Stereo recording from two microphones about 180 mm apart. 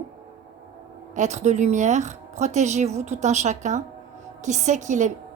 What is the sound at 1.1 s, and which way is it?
A woman's voice, 40° right (ahead or behind).